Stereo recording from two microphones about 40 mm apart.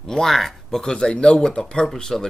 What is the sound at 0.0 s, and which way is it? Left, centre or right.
Speech, centre.